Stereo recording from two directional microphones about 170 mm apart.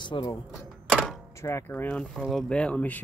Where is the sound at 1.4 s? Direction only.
15° left (ahead or behind).